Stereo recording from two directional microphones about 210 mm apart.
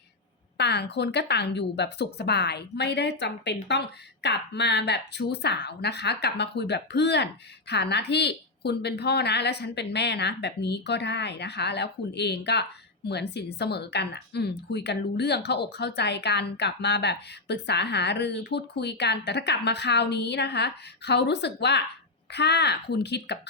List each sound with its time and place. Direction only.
0.5 s a woman's voice: 55° left (ahead or behind)